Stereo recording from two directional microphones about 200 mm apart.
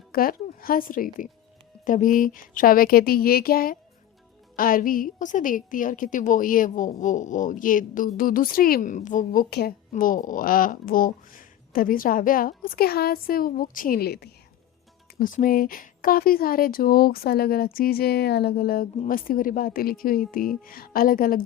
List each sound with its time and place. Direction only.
0.1 s a woman's voice: 45° left (ahead or behind)